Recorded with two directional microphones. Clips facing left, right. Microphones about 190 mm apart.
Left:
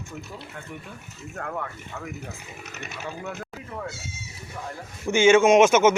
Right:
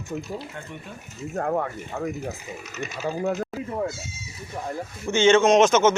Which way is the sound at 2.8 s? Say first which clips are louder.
Right 7 dB; 60° left (ahead or behind).